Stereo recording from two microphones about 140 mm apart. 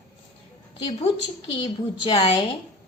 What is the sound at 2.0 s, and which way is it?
Speech, 40° left (ahead or behind).